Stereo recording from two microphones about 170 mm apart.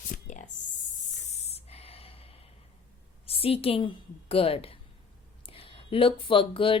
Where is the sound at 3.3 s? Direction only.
35° left (ahead or behind).